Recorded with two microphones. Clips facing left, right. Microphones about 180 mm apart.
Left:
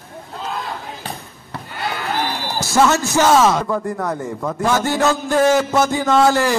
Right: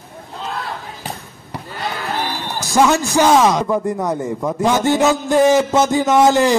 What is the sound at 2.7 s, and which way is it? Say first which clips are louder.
A man's voice: right 1 dB; 15° right (ahead or behind).